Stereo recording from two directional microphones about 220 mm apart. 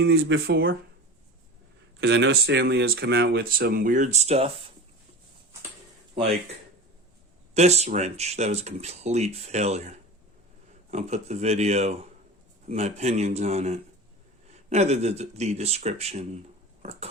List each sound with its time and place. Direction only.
0.0 s speech: 55° right (ahead or behind)
2.0 s speech: 55° right (ahead or behind); by 4.5 s 30° right (ahead or behind)
7.5 s a man's voice: 30° right (ahead or behind)
16.8 s biting: 30° right (ahead or behind)